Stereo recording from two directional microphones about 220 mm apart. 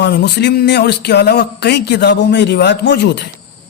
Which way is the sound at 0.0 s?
50° left (ahead or behind).